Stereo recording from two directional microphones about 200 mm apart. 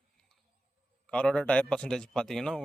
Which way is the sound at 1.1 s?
5° left (ahead or behind).